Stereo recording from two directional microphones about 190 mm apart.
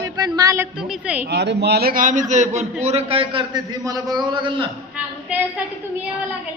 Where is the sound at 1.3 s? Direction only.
60° right (ahead or behind); by 2.2 s 45° right (ahead or behind).